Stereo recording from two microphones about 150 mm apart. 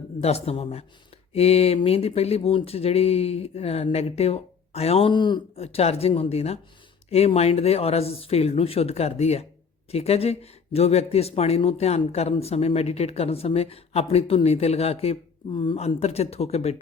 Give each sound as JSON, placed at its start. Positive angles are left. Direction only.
{"t": 0.2, "sound": "a man's voice", "side_deg": 45}
{"t": 5.6, "sound": "speech", "side_deg": 45}